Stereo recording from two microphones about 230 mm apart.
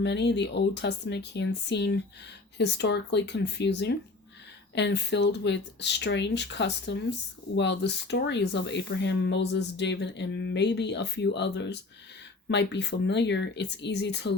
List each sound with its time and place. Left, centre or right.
0.0 s speech: left